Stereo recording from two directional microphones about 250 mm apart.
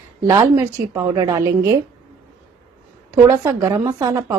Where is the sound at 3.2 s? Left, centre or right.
Centre.